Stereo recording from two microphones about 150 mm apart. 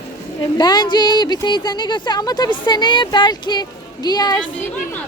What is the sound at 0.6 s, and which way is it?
Speech, 30° left (ahead or behind).